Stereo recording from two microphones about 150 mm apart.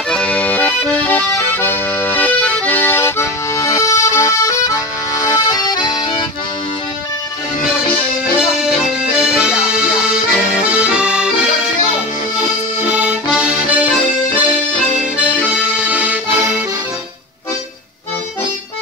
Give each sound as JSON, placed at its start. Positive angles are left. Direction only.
{"t": 0.1, "sound": "accordion", "side_deg": 10}
{"t": 8.4, "sound": "accordion", "side_deg": -5}
{"t": 12.4, "sound": "accordion", "side_deg": -5}
{"t": 15.1, "sound": "accordion", "side_deg": -10}